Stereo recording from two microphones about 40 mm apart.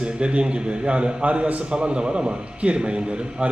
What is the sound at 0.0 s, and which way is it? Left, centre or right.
A man's voice, right.